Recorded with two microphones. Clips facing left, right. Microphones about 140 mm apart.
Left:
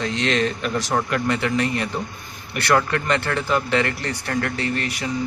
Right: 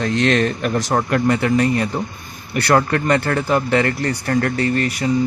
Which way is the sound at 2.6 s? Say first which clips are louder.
Right 3 dB; 40° right (ahead or behind).